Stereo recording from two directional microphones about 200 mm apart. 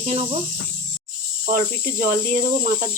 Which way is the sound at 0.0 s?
30° right (ahead or behind).